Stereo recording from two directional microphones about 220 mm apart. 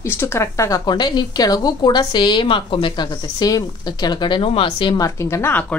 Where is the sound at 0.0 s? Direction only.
10° left (ahead or behind).